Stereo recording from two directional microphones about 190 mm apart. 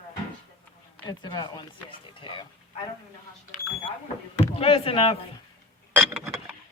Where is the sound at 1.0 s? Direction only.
20° left (ahead or behind).